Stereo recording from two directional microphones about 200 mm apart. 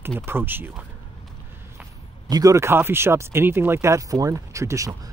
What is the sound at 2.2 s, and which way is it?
Speech, 15° right (ahead or behind).